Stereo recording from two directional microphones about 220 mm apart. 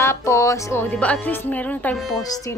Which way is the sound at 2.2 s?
15° left (ahead or behind).